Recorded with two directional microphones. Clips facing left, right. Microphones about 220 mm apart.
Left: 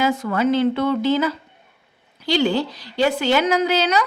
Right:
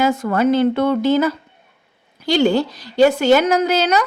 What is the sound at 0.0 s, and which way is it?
A woman's voice, 45° right (ahead or behind).